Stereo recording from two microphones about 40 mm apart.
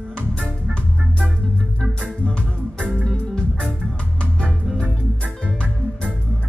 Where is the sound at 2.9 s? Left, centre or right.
Left.